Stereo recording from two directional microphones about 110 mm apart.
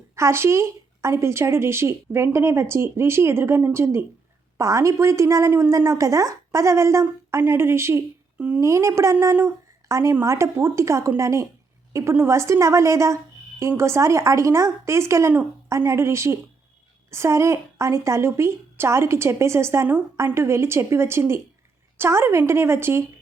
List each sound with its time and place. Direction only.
0.2 s a woman's voice: 25° right (ahead or behind)
8.6 s a woman's voice: 25° right (ahead or behind)